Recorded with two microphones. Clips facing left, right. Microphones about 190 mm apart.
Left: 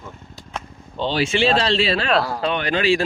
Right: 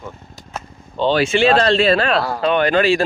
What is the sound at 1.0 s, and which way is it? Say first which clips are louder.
Speech: right 5 dB; 50° right (ahead or behind).